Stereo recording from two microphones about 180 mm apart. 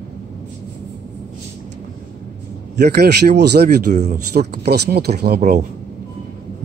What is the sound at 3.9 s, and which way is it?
Speech, 40° right (ahead or behind).